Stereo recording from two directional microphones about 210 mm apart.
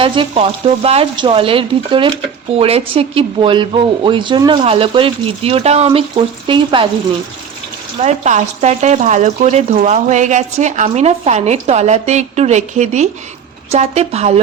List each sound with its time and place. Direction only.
0.0 s speech: 25° right (ahead or behind)
8.0 s speech: 35° right (ahead or behind)